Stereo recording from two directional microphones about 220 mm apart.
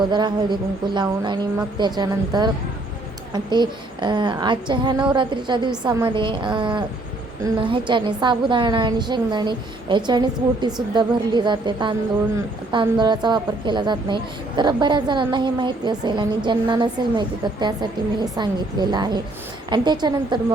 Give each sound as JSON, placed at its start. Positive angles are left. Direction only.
{"t": 0.1, "sound": "speech", "side_deg": -20}